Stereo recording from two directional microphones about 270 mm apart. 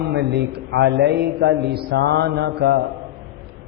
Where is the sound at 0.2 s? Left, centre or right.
Right.